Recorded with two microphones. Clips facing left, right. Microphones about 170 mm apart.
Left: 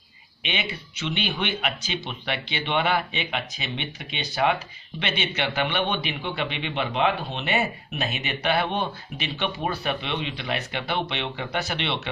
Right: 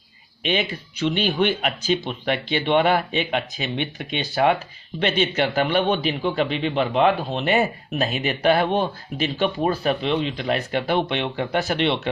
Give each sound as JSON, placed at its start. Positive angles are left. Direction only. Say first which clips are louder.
{"t": 0.4, "sound": "a man's voice", "louder": "right 7 dB", "side_deg": -40}